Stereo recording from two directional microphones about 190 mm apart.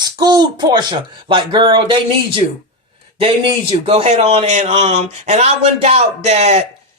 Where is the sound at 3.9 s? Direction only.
35° right (ahead or behind).